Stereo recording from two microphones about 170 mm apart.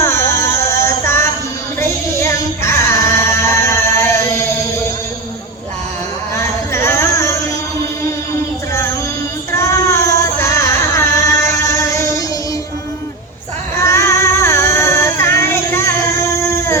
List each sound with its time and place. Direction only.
0.0 s a sound: 15° left (ahead or behind)
1.8 s female singing: 15° left (ahead or behind)
6.3 s a sound: 15° left (ahead or behind)
9.5 s child singing: 15° left (ahead or behind)
11.9 s music: 20° left (ahead or behind)
13.7 s child singing: 15° left (ahead or behind)